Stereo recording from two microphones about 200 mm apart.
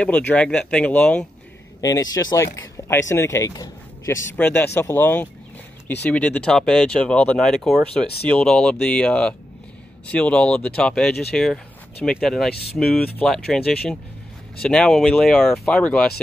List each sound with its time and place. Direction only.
0.3 s speech: 5° left (ahead or behind)
1.8 s a man's voice: 15° left (ahead or behind)